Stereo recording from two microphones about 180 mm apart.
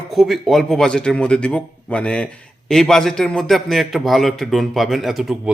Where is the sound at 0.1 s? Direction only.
Centre (ahead or behind).